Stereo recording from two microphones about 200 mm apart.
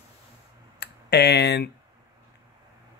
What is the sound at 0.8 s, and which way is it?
Speech, 55° left (ahead or behind).